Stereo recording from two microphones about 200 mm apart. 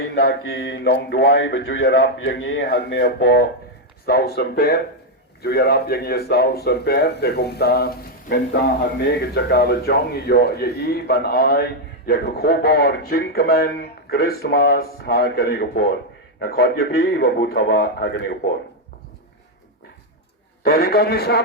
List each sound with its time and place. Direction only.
0.1 s a man's voice: 50° left (ahead or behind)
20.7 s a man's voice: 50° left (ahead or behind)